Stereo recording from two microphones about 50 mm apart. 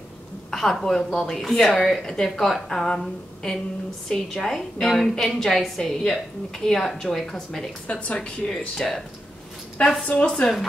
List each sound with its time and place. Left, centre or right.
0.5 s a woman's voice: centre
7.8 s speech: left
8.5 s a woman's voice: centre
10.0 s speech: left